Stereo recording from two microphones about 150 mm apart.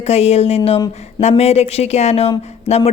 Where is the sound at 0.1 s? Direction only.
45° left (ahead or behind).